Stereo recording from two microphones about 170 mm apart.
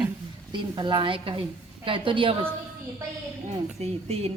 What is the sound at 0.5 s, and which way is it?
A woman's voice, 25° right (ahead or behind).